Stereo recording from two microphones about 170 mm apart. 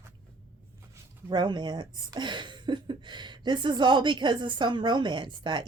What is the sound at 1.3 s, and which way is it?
Speech, 25° right (ahead or behind).